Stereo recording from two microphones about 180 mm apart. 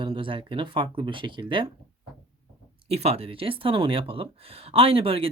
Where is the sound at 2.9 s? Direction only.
35° right (ahead or behind).